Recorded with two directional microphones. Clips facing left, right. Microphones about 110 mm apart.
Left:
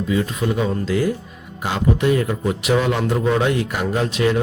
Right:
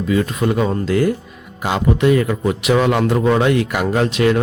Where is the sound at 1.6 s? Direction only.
90° right.